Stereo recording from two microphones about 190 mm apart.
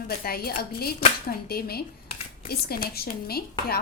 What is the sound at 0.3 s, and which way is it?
Speech, 55° left (ahead or behind).